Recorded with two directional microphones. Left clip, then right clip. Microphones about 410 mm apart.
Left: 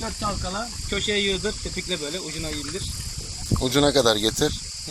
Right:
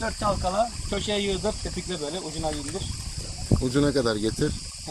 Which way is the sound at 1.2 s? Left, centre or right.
Centre.